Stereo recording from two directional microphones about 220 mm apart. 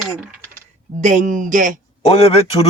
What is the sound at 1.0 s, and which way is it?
Speech, 35° right (ahead or behind).